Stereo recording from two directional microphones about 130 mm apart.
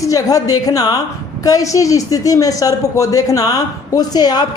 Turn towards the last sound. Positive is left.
turn(degrees=30)  # may be behind; listen again after turning